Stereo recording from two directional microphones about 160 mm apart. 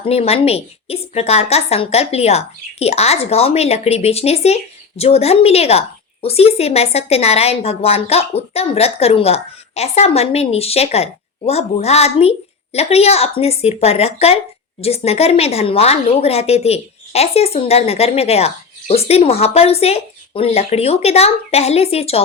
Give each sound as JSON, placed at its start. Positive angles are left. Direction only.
{"t": 0.0, "sound": "a woman's voice", "side_deg": 40}